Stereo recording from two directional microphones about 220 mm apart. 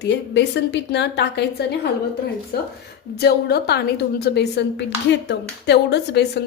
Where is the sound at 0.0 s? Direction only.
50° left (ahead or behind).